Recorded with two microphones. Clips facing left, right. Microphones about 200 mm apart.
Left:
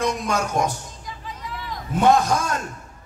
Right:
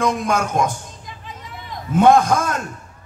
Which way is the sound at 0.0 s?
50° right (ahead or behind).